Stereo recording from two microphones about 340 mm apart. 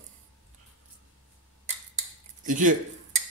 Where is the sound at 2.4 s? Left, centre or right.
Right.